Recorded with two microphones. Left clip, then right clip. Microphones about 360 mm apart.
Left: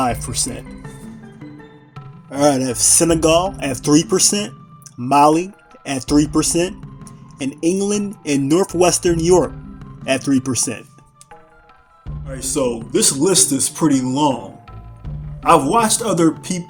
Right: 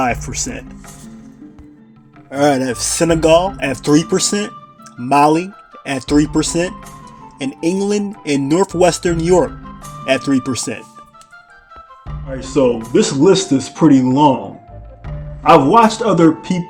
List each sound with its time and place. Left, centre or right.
2.3 s speech: left
12.3 s speech: left
15.4 s a man's voice: left